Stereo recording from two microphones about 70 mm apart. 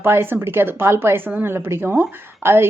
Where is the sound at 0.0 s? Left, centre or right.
Right.